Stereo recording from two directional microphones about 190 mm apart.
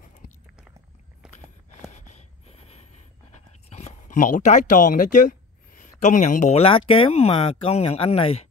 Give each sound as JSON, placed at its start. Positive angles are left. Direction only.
{"t": 1.2, "sound": "walk", "side_deg": -5}
{"t": 1.9, "sound": "a sound", "side_deg": 35}
{"t": 5.8, "sound": "speech", "side_deg": 40}